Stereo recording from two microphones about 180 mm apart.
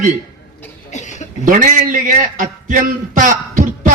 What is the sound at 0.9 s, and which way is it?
Cough, 40° left (ahead or behind).